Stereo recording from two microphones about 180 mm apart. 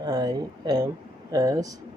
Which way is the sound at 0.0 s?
20° right (ahead or behind).